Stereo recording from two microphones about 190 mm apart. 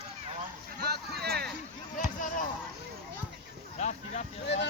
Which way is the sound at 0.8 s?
55° right (ahead or behind).